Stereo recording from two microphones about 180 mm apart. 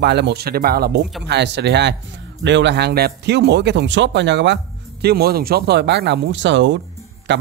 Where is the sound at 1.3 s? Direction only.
75° right (ahead or behind).